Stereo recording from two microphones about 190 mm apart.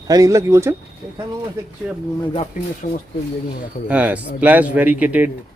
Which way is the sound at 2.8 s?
45° left (ahead or behind).